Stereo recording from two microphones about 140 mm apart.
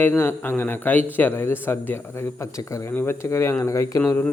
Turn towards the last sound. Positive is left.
turn(degrees=20)  # may be behind; listen again after turning